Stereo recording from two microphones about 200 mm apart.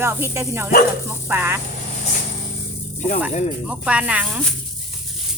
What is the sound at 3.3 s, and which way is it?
Speech, 35° left (ahead or behind).